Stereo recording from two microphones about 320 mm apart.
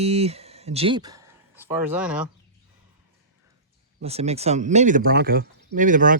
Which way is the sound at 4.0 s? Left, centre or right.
Centre.